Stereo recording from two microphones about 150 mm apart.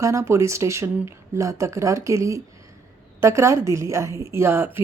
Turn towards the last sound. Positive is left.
turn(degrees=-15)  # may be behind; listen again after turning